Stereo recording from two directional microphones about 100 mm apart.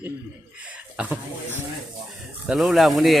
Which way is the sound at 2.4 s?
Centre (ahead or behind).